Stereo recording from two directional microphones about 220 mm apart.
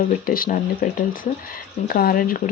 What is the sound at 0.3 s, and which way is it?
Speech, 40° left (ahead or behind).